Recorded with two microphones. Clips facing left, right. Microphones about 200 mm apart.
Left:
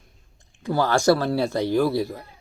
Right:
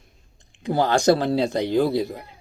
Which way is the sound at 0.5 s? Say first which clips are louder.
Right 1 dB; 20° right (ahead or behind).